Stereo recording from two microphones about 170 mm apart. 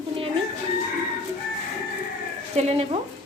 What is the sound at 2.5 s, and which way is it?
Speech, 40° right (ahead or behind).